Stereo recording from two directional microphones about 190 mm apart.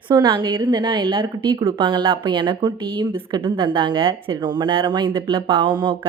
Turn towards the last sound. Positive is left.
turn(degrees=-25)  # may be behind; listen again after turning